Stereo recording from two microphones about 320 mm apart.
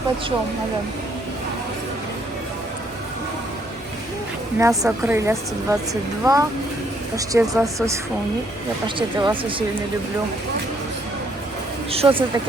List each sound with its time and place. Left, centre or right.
4.5 s a woman's voice: centre
9.0 s a woman's voice: centre
11.9 s a woman's voice: centre